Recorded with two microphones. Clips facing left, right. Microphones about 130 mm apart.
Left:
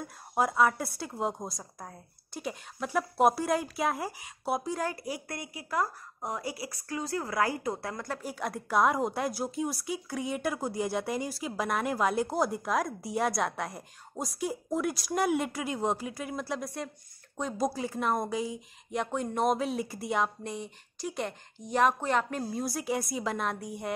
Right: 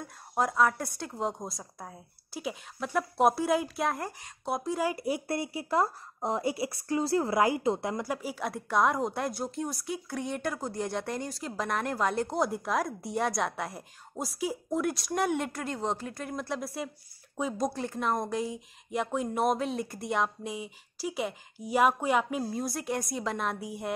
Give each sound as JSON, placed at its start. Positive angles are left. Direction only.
{"t": 0.0, "sound": "speech", "side_deg": 5}
{"t": 4.9, "sound": "speech", "side_deg": -25}
{"t": 8.0, "sound": "speech", "side_deg": -5}